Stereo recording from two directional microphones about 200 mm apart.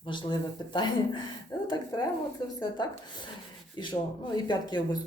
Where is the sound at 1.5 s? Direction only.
15° left (ahead or behind).